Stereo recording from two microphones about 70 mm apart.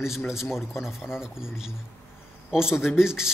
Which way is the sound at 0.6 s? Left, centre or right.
Centre.